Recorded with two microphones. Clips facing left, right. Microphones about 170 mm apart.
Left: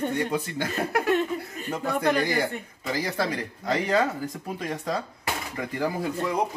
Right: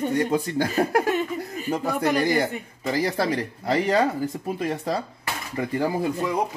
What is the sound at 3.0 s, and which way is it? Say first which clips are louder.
Speech: right 4 dB; 35° right (ahead or behind).